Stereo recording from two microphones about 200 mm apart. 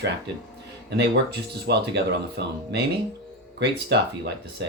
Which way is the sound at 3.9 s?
60° right (ahead or behind).